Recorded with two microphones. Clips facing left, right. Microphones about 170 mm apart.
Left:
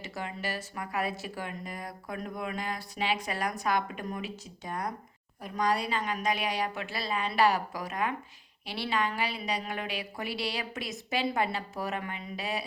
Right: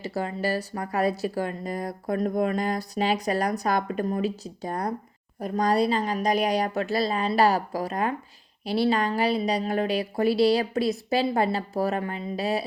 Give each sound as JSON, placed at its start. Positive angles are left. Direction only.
{"t": 0.0, "sound": "speech", "side_deg": -35}